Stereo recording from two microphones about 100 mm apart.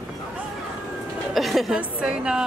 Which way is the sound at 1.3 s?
Centre (ahead or behind).